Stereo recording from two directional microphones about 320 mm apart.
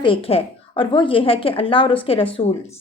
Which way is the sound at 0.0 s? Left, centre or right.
Centre.